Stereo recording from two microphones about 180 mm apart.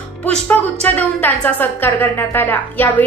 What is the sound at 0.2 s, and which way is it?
A woman's voice, 10° left (ahead or behind).